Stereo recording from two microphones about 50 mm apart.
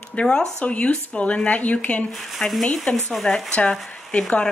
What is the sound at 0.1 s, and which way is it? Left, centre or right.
Speech, centre.